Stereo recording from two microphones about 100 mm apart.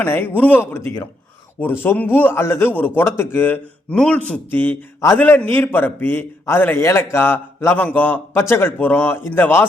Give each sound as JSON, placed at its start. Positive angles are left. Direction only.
{"t": 0.0, "sound": "a man's voice", "side_deg": 20}